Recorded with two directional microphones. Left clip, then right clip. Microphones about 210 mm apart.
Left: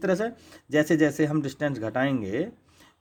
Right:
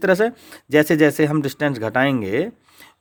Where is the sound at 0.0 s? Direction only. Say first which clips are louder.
Right 9 dB; 35° right (ahead or behind).